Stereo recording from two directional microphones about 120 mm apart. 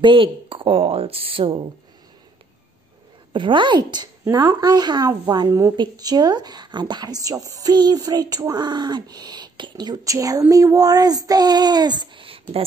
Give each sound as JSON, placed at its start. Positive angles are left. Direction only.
{"t": 0.0, "sound": "speech", "side_deg": -45}
{"t": 3.3, "sound": "a woman's voice", "side_deg": -45}